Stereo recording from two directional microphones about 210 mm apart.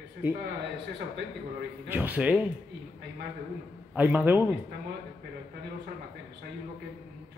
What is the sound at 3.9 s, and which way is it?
Speech, 10° right (ahead or behind).